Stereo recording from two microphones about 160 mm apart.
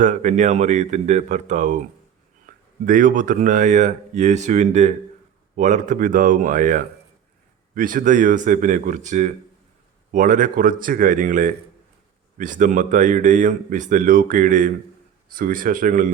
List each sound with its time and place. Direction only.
0.0 s speech: 50° right (ahead or behind)
2.5 s a sound: 60° right (ahead or behind)
2.8 s speech: 55° right (ahead or behind)